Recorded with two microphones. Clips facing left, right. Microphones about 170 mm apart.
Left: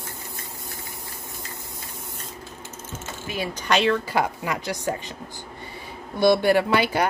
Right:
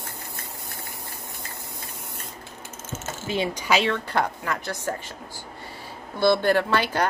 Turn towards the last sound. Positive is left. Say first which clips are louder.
# left 2 dB
turn(degrees=10)  # may be behind; listen again after turning